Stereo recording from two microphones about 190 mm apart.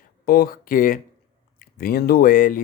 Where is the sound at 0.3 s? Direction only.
50° left (ahead or behind).